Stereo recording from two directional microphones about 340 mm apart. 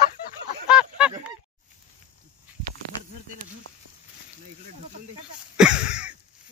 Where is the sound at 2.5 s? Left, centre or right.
Centre.